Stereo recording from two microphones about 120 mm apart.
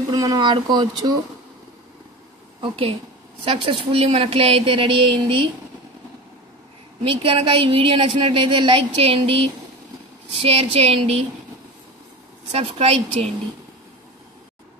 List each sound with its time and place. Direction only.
0.1 s speech: 35° right (ahead or behind)
2.6 s a woman's voice: 50° right (ahead or behind)
7.1 s a woman's voice: 50° right (ahead or behind)
12.5 s a woman's voice: 55° right (ahead or behind)